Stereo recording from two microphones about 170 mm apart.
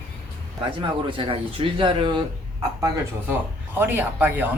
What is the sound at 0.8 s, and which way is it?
Speech, 30° right (ahead or behind).